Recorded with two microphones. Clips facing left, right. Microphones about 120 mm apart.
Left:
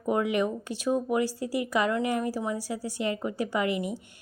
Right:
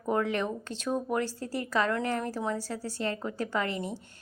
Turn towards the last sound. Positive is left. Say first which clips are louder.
# left 3 dB
turn(degrees=15)  # may be behind; listen again after turning